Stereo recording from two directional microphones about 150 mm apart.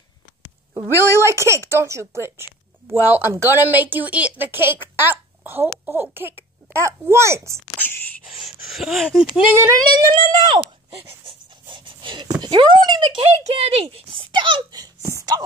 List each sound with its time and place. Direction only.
0.7 s a woman's voice: 15° right (ahead or behind)
8.3 s a sound: centre (ahead or behind)
9.6 s speech: 25° right (ahead or behind)
11.0 s pant: 35° right (ahead or behind)